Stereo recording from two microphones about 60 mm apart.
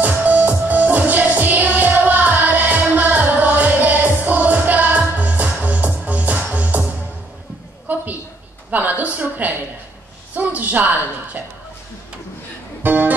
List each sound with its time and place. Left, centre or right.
0.0 s music: right
7.9 s a sound: right
12.8 s music: right